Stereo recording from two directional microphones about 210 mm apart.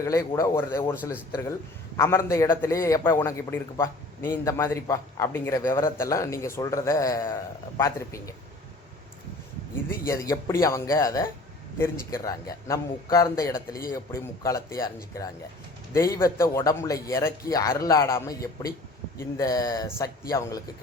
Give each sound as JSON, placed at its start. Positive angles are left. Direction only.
{"t": 0.0, "sound": "a man's voice", "side_deg": 15}
{"t": 2.0, "sound": "a man's voice", "side_deg": 15}
{"t": 9.9, "sound": "a man's voice", "side_deg": 15}
{"t": 19.4, "sound": "a man's voice", "side_deg": 15}